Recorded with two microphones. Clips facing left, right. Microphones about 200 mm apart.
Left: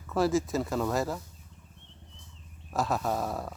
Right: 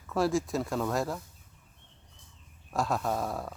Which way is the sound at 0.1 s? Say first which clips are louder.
Left 1 dB; centre (ahead or behind).